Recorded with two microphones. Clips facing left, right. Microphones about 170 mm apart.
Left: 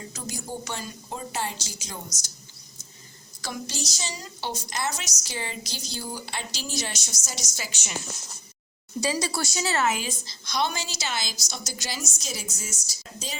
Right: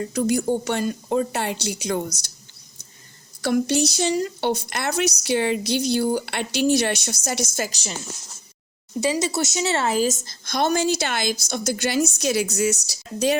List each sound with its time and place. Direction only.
0.0 s speech: 60° right (ahead or behind)
3.4 s speech: 60° right (ahead or behind)
7.7 s a woman's voice: 35° right (ahead or behind)
9.0 s speech: 20° right (ahead or behind); by 13.3 s 70° right (ahead or behind)